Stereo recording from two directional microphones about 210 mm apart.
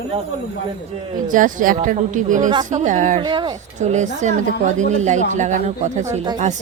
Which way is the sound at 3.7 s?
35° right (ahead or behind).